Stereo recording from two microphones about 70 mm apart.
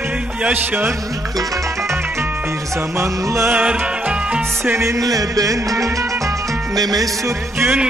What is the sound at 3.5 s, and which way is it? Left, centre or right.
Music, centre.